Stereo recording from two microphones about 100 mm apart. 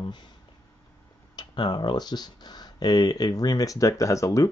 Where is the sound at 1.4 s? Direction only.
45° left (ahead or behind).